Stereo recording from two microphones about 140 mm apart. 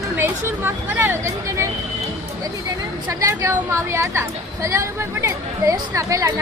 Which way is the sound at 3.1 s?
20° right (ahead or behind).